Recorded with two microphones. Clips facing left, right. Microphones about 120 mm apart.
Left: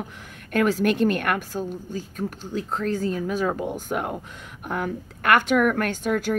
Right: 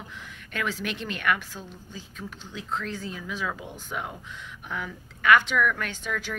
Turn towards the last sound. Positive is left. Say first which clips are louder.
# left 9 dB
turn(degrees=45)  # may be behind; listen again after turning